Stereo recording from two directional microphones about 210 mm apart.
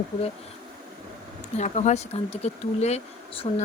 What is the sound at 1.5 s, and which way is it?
Speech, 35° left (ahead or behind).